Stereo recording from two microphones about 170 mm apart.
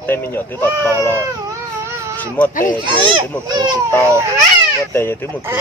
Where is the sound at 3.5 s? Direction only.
25° right (ahead or behind).